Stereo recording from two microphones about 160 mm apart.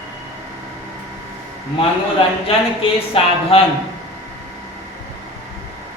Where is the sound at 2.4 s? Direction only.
35° left (ahead or behind).